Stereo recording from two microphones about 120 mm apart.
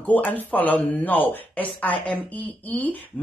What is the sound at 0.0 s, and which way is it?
Speech, 15° left (ahead or behind).